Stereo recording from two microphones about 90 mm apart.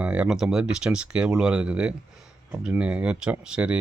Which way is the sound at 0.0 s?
15° right (ahead or behind).